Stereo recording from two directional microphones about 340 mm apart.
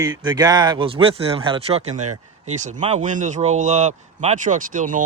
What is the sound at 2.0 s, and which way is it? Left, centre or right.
Speech, right.